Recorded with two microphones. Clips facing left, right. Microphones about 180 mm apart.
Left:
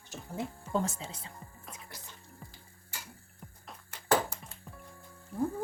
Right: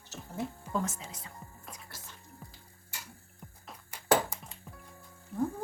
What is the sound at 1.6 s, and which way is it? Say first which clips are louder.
Music: even; centre (ahead or behind).